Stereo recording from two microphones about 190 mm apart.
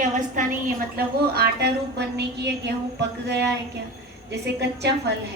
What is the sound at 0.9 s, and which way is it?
A woman's voice, 55° right (ahead or behind).